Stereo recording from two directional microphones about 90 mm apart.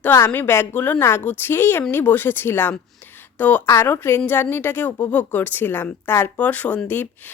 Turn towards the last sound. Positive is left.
turn(degrees=20)  # may be behind; listen again after turning